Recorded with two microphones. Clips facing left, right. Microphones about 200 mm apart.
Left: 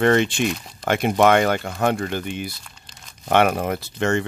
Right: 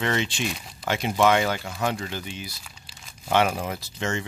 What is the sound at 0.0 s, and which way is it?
Speech, 55° left (ahead or behind).